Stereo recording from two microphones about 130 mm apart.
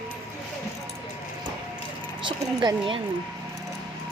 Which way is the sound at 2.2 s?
40° right (ahead or behind).